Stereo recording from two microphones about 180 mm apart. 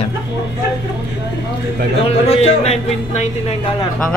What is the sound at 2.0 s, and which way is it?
Speech, 35° left (ahead or behind).